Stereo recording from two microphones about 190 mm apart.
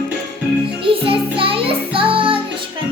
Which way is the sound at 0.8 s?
30° right (ahead or behind).